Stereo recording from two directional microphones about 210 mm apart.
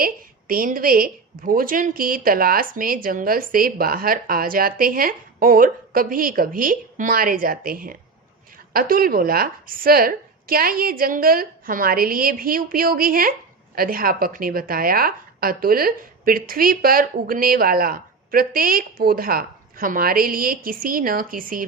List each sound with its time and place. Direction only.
0.0 s a woman's voice: 45° right (ahead or behind)